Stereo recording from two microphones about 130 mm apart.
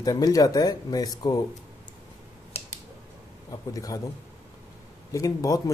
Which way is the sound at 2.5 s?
50° left (ahead or behind).